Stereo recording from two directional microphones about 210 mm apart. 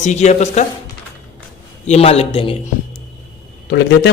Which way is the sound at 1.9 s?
30° left (ahead or behind).